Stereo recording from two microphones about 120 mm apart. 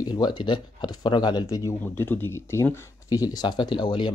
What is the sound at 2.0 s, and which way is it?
Speech, 20° left (ahead or behind).